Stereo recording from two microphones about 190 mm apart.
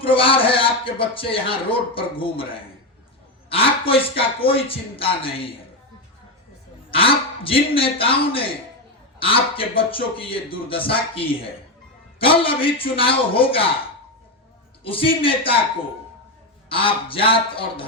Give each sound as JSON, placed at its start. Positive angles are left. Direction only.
{"t": 0.0, "sound": "a man's voice", "side_deg": 30}
{"t": 3.5, "sound": "a man's voice", "side_deg": 30}
{"t": 6.9, "sound": "a man's voice", "side_deg": 30}
{"t": 14.8, "sound": "a man's voice", "side_deg": 30}
{"t": 16.6, "sound": "a man's voice", "side_deg": 30}